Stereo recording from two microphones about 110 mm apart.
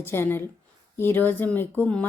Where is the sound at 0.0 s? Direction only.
20° left (ahead or behind).